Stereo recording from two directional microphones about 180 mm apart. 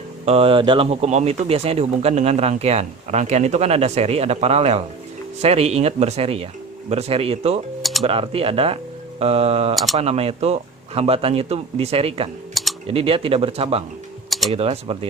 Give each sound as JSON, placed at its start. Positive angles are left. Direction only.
{"t": 0.3, "sound": "speech", "side_deg": -30}
{"t": 7.8, "sound": "music", "side_deg": 0}
{"t": 8.0, "sound": "speech", "side_deg": -30}
{"t": 9.7, "sound": "speech", "side_deg": 0}
{"t": 10.0, "sound": "speech", "side_deg": -35}
{"t": 12.6, "sound": "typing", "side_deg": 0}
{"t": 12.9, "sound": "speech", "side_deg": -30}